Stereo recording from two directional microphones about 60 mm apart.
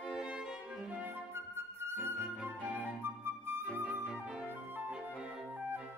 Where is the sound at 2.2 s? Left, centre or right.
Right.